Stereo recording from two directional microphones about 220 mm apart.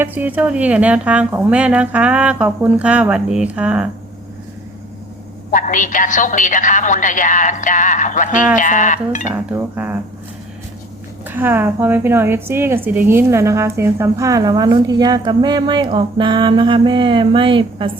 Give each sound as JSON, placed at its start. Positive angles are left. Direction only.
{"t": 0.0, "sound": "a woman's voice", "side_deg": -10}
{"t": 5.5, "sound": "a woman's voice", "side_deg": 35}
{"t": 9.3, "sound": "a woman's voice", "side_deg": -10}
{"t": 11.3, "sound": "a woman's voice", "side_deg": -10}